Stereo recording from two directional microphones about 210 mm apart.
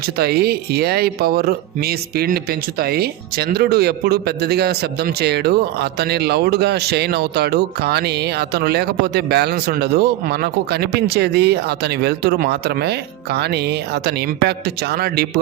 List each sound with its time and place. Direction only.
0.2 s speech: 50° right (ahead or behind)